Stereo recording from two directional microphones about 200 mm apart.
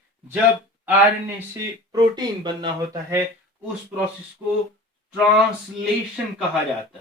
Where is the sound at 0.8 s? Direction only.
10° right (ahead or behind).